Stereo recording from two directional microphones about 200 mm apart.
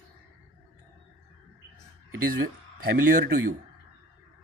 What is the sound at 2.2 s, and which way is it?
Speech, 50° right (ahead or behind).